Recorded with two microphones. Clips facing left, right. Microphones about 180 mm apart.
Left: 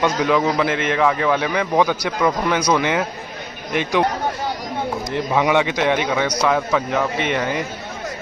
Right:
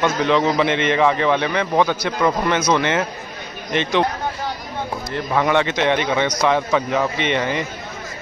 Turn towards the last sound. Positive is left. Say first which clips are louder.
# even
turn(degrees=5)  # may be behind; listen again after turning